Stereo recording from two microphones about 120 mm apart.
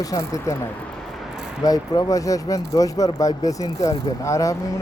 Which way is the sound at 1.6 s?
30° left (ahead or behind).